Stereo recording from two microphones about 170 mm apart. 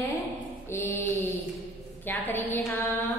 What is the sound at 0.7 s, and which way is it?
Mantra, 15° left (ahead or behind).